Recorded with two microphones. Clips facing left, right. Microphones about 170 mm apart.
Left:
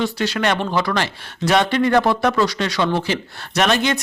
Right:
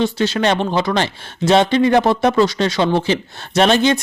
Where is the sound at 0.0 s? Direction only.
25° right (ahead or behind).